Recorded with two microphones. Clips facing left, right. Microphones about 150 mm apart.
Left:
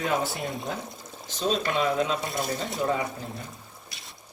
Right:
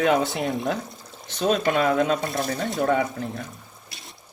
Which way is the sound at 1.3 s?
60° right (ahead or behind).